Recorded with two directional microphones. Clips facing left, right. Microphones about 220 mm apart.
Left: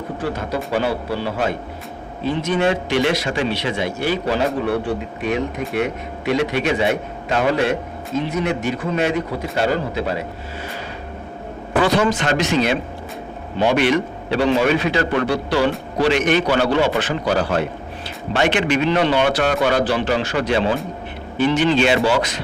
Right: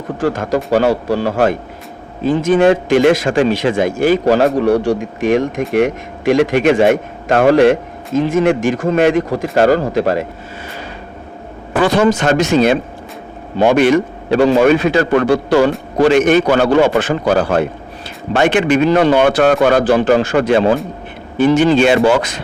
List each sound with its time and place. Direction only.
0.2 s a man's voice: 45° right (ahead or behind)
11.8 s a man's voice: 50° right (ahead or behind)